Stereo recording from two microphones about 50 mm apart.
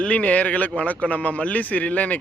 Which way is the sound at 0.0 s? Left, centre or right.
Left.